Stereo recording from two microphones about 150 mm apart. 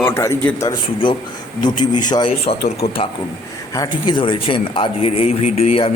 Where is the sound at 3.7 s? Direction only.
25° left (ahead or behind).